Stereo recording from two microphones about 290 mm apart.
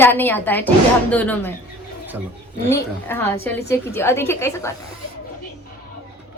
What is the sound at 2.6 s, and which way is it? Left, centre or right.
A woman's voice, centre.